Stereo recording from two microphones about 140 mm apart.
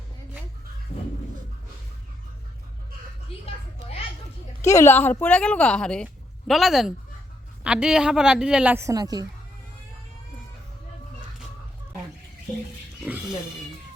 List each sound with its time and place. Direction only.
3.3 s speech: 45° left (ahead or behind)
4.6 s a woman's voice: 20° left (ahead or behind); by 9.2 s 25° right (ahead or behind)
13.1 s a woman's voice: 5° right (ahead or behind)